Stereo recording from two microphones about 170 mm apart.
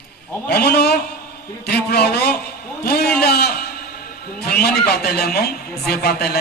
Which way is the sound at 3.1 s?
70° left (ahead or behind).